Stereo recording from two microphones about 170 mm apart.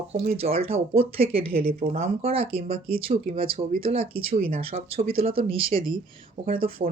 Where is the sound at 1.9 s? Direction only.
35° right (ahead or behind).